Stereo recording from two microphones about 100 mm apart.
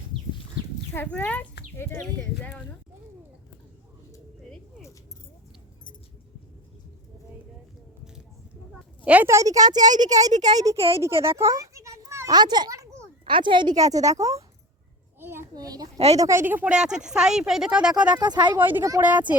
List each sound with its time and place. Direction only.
0.9 s speech: 15° left (ahead or behind)
9.2 s a woman's voice: 30° right (ahead or behind)
12.3 s a woman's voice: 45° right (ahead or behind)
12.7 s a sound: 30° right (ahead or behind)
13.2 s a woman's voice: 55° right (ahead or behind)
13.7 s a woman's voice: 35° right (ahead or behind)
15.2 s a sound: 25° right (ahead or behind)
15.5 s a woman's voice: 40° right (ahead or behind)
16.0 s a woman's voice: 90° right
16.2 s speech: 25° right (ahead or behind)
18.2 s a woman's voice: 50° right (ahead or behind)
18.9 s speech: 15° right (ahead or behind)